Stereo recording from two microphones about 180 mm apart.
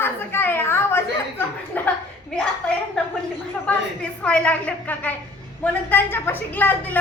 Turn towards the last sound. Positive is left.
turn(degrees=10)  # may be behind; listen again after turning